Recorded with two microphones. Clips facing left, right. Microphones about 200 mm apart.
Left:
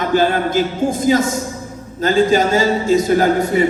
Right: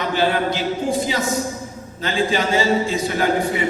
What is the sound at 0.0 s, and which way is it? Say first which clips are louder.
A man's voice: left 4 dB; 45° left (ahead or behind).